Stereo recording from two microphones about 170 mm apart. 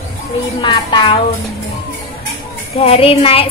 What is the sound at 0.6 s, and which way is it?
Speech, 30° left (ahead or behind).